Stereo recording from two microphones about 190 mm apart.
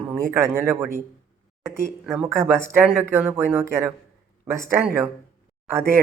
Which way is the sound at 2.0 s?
5° right (ahead or behind).